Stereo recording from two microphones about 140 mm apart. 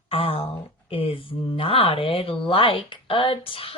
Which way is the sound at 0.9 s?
40° left (ahead or behind).